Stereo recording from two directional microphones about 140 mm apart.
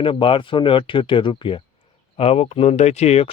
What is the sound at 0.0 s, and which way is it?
Speech, 40° left (ahead or behind).